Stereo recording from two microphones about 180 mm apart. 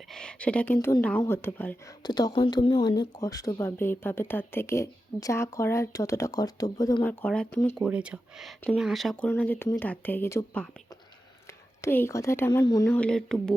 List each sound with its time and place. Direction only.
0.1 s speech: 5° left (ahead or behind)
2.0 s speech: 20° left (ahead or behind)
7.0 s speech: 10° left (ahead or behind)
7.8 s speech: 5° right (ahead or behind)
9.3 s speech: 10° left (ahead or behind)
11.8 s speech: 15° left (ahead or behind)
13.0 s speech: 5° left (ahead or behind)